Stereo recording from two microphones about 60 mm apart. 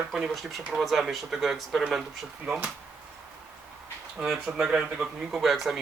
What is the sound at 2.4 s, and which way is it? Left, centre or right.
Speech, right.